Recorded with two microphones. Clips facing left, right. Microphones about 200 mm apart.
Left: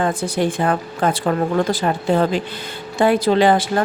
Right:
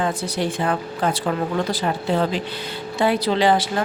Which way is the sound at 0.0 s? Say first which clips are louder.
Left 4 dB; 50° left (ahead or behind).